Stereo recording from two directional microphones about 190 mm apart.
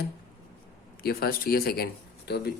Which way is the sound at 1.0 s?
50° left (ahead or behind).